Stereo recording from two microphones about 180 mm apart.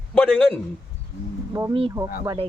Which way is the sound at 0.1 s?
5° left (ahead or behind).